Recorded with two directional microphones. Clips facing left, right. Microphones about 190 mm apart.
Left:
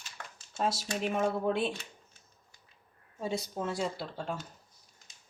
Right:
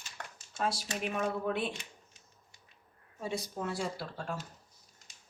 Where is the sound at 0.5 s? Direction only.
25° left (ahead or behind).